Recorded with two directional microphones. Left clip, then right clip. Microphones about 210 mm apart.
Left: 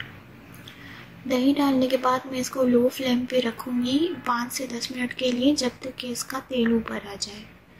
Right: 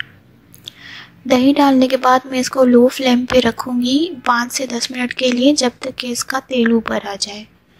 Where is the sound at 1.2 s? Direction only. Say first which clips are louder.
Right 10 dB; 40° right (ahead or behind).